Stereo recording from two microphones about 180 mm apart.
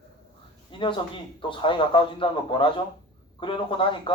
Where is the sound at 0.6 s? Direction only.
30° left (ahead or behind).